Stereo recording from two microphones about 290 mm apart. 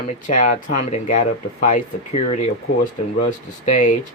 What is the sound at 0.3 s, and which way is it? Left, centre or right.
Speech, left.